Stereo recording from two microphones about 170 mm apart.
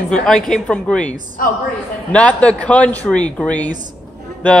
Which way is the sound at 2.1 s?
5° left (ahead or behind).